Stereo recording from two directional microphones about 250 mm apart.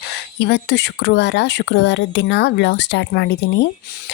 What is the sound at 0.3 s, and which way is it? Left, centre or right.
Speech, left.